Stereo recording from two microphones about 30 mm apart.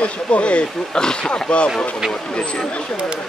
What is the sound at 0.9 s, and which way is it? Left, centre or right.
Speech, left.